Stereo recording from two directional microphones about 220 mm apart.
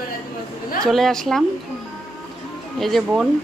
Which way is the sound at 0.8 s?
Centre (ahead or behind).